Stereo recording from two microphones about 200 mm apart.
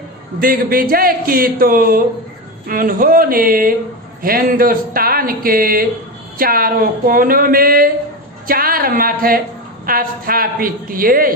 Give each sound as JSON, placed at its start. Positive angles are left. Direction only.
{"t": 0.3, "sound": "speech", "side_deg": -45}